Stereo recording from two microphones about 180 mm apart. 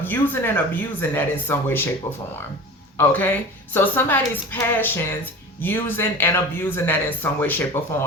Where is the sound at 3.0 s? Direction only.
10° left (ahead or behind).